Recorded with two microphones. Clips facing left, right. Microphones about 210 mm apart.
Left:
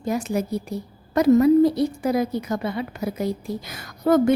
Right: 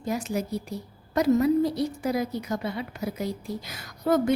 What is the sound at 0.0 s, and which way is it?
A woman's voice, 55° left (ahead or behind).